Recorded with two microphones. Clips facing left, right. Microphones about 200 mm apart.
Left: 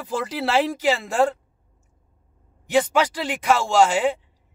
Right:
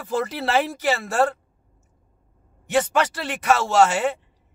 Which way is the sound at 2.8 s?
10° left (ahead or behind).